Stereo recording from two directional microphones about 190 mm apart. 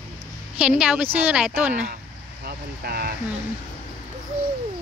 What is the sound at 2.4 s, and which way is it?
Speech, 55° right (ahead or behind).